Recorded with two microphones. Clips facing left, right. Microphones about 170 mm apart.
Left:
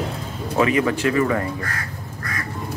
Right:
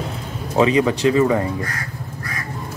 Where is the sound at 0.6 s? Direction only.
20° right (ahead or behind).